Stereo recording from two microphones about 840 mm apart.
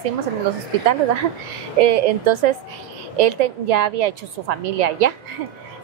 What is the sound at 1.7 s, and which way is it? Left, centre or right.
A woman's voice, right.